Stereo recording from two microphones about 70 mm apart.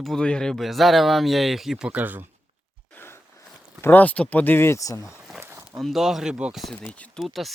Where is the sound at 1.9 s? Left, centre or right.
Right.